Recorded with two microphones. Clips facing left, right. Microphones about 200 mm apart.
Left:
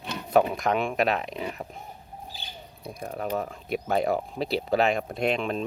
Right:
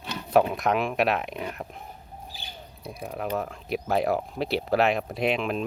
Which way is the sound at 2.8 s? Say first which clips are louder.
Even; centre (ahead or behind).